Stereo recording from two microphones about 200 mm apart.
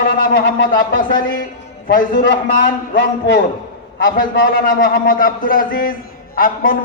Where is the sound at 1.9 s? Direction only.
45° left (ahead or behind).